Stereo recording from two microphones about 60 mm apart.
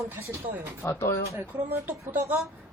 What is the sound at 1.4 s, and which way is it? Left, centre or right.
Speech, right.